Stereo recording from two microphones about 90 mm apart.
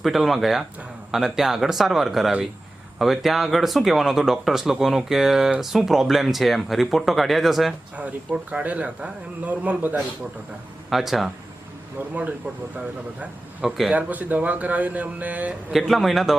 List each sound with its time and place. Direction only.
0.0 s speech: centre (ahead or behind)
7.9 s speech: 15° right (ahead or behind)
10.8 s speech: centre (ahead or behind)
11.9 s speech: 20° right (ahead or behind)
13.7 s speech: centre (ahead or behind)
13.9 s speech: 20° right (ahead or behind)
15.7 s speech: centre (ahead or behind)